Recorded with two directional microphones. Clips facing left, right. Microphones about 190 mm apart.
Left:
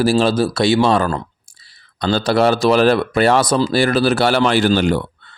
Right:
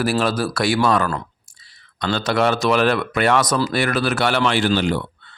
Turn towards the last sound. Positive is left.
turn(degrees=45)  # may be behind; listen again after turning